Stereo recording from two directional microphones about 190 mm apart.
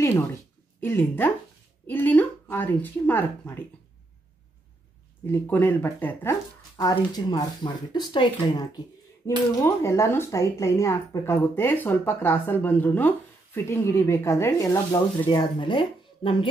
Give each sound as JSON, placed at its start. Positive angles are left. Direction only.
{"t": 0.7, "sound": "a woman's voice", "side_deg": 10}
{"t": 5.2, "sound": "a woman's voice", "side_deg": 10}